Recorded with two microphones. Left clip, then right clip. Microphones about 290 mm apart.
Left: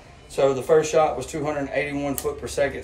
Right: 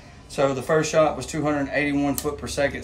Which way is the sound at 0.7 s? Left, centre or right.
Centre.